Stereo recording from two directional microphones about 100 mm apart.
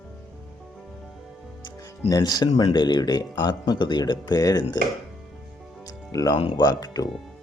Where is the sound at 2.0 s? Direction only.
40° left (ahead or behind).